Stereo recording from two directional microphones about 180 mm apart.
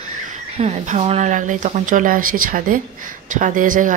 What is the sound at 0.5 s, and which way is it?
Speech, 40° right (ahead or behind).